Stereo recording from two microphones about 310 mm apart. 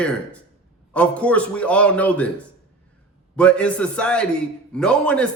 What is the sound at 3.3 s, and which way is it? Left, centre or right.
A man's voice, centre.